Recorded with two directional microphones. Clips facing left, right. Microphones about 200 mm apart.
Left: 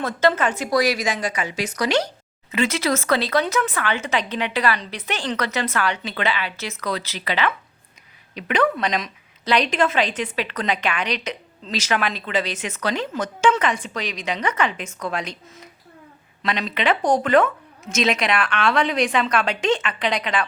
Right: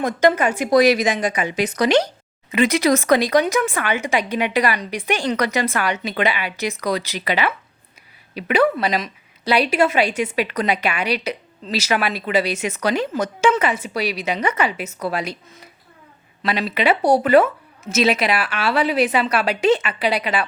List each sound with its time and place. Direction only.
0.0 s a woman's voice: 15° right (ahead or behind)